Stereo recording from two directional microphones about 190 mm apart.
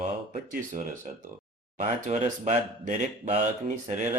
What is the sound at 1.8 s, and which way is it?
Speech, 40° right (ahead or behind).